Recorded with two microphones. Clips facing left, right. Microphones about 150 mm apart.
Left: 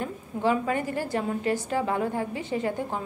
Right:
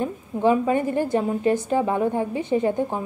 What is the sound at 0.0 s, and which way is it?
A woman's voice, 20° right (ahead or behind).